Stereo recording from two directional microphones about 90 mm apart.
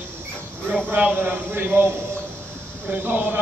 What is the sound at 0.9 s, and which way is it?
A man's voice, 20° right (ahead or behind).